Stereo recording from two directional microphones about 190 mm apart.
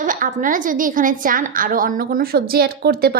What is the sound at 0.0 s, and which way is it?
A woman's voice, 45° right (ahead or behind).